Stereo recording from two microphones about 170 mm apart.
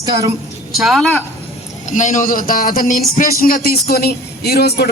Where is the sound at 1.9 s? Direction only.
45° left (ahead or behind).